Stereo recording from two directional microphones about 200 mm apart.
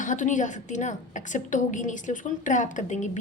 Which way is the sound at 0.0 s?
40° left (ahead or behind).